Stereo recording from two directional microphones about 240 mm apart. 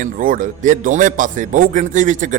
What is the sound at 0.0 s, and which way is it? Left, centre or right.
Music, right.